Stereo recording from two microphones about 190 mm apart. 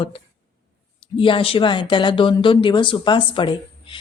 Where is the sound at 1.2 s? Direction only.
30° left (ahead or behind).